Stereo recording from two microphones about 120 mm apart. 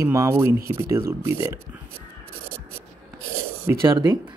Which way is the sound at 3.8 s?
40° right (ahead or behind).